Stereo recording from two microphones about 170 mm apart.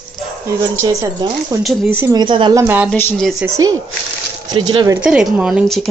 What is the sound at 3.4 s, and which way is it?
Speech, 20° right (ahead or behind).